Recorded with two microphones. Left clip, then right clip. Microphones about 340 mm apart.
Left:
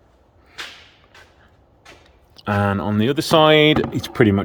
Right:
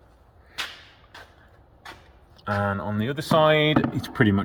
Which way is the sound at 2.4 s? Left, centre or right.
Left.